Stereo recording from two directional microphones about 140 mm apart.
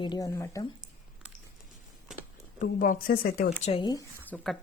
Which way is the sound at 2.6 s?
75° left (ahead or behind).